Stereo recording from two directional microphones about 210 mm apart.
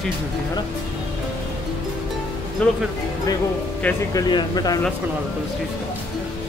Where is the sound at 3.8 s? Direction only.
20° left (ahead or behind).